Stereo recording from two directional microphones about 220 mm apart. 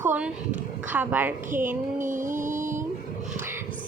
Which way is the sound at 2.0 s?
35° right (ahead or behind).